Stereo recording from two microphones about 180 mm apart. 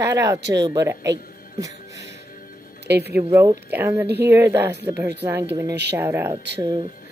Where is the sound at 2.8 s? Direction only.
65° right (ahead or behind).